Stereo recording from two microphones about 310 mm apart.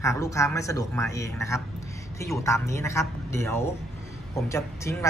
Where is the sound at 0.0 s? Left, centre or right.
Centre.